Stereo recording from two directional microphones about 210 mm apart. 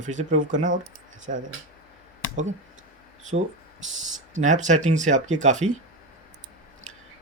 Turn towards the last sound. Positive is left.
turn(degrees=-35)  # may be behind; listen again after turning